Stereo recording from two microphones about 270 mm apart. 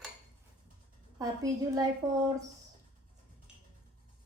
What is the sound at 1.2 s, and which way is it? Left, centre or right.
A woman's voice, centre.